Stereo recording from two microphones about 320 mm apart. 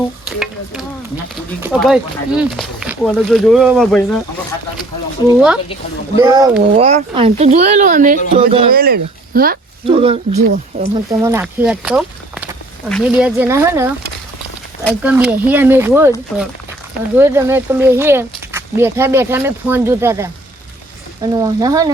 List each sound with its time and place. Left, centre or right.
0.3 s stir: centre
1.6 s speech: centre
6.1 s speech: centre
8.7 s speech: right
9.8 s speech: centre
11.2 s speech: centre
17.2 s speech: centre